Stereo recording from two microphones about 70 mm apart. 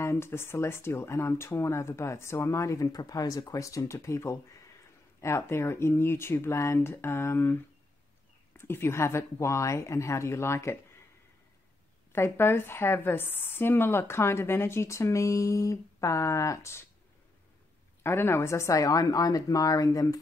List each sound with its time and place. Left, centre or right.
0.0 s a woman's voice: left
2.9 s a woman's voice: left
8.5 s a woman's voice: left
12.1 s a woman's voice: left
18.0 s a woman's voice: left